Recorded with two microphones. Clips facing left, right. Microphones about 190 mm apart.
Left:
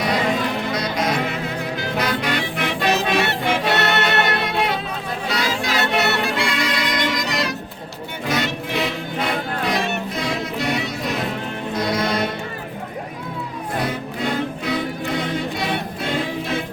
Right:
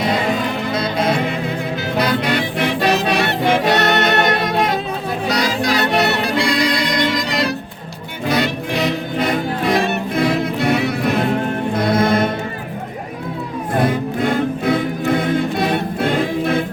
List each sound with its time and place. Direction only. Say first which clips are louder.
0.7 s music: right 4 dB; 30° right (ahead or behind)
9.7 s music: right 6 dB; 55° right (ahead or behind)
13.7 s music: right 8 dB; 50° right (ahead or behind)